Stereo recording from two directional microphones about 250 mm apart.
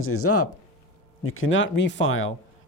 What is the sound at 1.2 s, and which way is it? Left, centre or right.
Speech, left.